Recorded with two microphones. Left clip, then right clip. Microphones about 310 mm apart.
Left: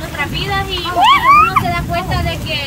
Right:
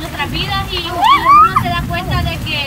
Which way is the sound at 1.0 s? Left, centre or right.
Left.